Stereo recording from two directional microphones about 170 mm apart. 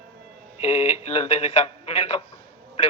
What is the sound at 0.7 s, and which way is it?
Speech, 40° left (ahead or behind).